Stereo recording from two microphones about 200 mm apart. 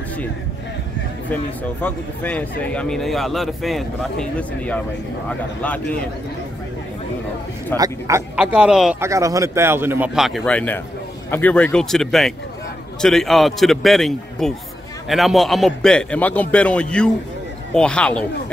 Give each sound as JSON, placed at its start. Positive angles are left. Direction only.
{"t": 1.3, "sound": "a man's voice", "side_deg": 10}
{"t": 7.7, "sound": "a man's voice", "side_deg": -15}
{"t": 8.4, "sound": "speech", "side_deg": -5}
{"t": 9.0, "sound": "a man's voice", "side_deg": -15}